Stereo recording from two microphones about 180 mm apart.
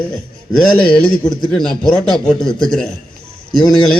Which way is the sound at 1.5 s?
5° left (ahead or behind).